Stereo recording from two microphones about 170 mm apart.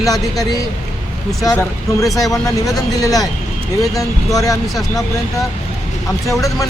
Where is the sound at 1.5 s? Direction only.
20° left (ahead or behind).